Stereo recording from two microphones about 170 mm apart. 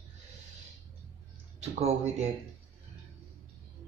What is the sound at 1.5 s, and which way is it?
Speech, 40° right (ahead or behind).